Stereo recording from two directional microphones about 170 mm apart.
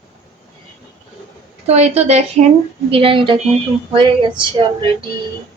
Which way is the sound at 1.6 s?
40° right (ahead or behind).